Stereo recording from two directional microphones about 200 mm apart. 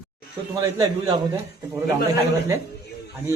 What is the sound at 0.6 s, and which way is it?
A man's voice, 20° right (ahead or behind).